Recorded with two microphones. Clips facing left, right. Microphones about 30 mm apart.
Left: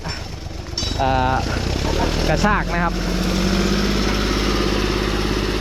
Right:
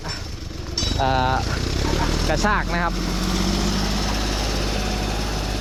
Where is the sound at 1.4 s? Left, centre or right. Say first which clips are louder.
Left 2 dB; centre.